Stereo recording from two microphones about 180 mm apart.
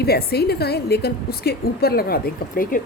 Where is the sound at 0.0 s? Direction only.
60° left (ahead or behind).